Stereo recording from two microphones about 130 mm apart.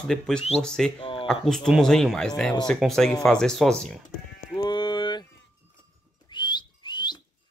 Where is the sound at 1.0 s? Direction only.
40° left (ahead or behind).